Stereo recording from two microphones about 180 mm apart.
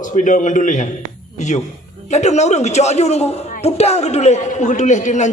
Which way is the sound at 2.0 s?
40° left (ahead or behind).